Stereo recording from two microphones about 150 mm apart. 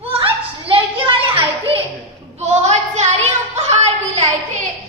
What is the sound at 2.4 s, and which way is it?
Child singing, 50° right (ahead or behind).